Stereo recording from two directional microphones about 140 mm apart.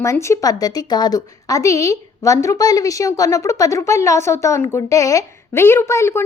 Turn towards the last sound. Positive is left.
turn(degrees=20)  # may be behind; listen again after turning